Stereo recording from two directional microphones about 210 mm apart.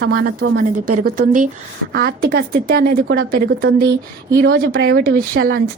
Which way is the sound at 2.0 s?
50° right (ahead or behind).